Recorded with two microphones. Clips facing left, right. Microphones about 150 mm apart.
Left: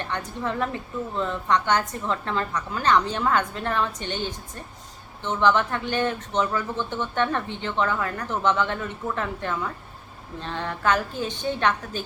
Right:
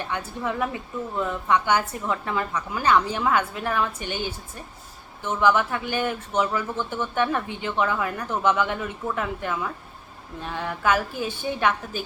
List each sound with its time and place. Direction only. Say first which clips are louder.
0.0 s speech: even; 10° right (ahead or behind)